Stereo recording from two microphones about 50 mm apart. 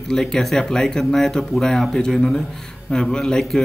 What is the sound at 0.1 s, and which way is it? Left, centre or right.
Speech, centre.